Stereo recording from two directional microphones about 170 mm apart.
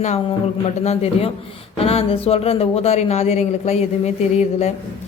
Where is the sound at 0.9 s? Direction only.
40° left (ahead or behind).